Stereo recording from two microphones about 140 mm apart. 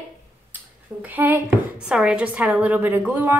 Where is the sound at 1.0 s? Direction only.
15° right (ahead or behind).